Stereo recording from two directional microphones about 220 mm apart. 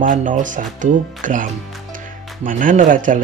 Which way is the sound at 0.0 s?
35° right (ahead or behind).